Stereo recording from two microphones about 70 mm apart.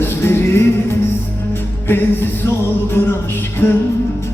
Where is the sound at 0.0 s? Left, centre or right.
Left.